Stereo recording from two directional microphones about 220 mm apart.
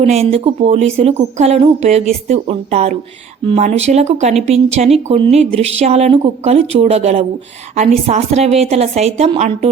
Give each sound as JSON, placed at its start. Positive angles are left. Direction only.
{"t": 0.0, "sound": "speech", "side_deg": -30}